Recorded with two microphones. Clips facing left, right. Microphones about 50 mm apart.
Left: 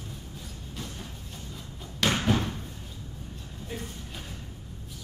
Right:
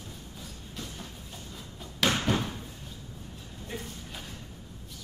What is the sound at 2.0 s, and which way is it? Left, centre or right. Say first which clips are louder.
Slam: even; centre.